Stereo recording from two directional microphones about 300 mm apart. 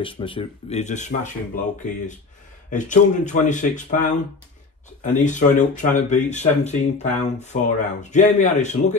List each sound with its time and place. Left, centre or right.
0.0 s speech: centre
2.7 s speech: left